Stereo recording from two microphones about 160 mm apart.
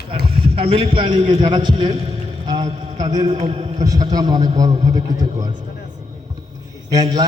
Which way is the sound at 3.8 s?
25° right (ahead or behind).